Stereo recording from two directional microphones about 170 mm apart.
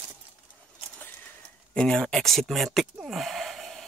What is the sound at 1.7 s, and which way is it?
Speech, 5° left (ahead or behind).